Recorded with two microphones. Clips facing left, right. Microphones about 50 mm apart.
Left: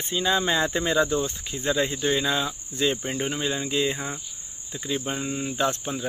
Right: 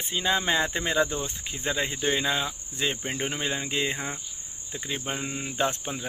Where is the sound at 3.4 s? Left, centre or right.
Right.